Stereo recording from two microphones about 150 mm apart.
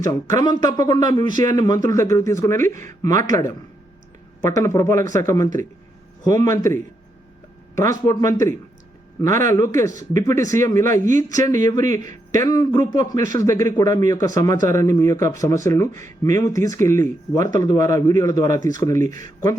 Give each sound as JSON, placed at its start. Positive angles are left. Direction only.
{"t": 0.0, "sound": "speech", "side_deg": 25}